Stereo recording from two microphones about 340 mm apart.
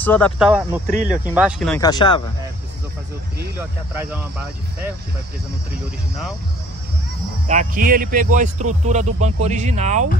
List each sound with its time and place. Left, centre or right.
0.0 s speech: centre
0.8 s speech: right
1.3 s speech: centre
3.3 s speech: centre
7.4 s speech: right